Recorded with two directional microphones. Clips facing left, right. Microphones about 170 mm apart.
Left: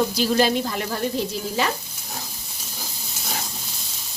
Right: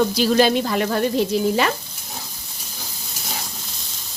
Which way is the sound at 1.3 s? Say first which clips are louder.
Right 10 dB; 65° right (ahead or behind).